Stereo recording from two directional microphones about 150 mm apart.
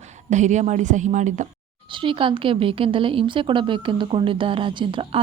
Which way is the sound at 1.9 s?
35° right (ahead or behind).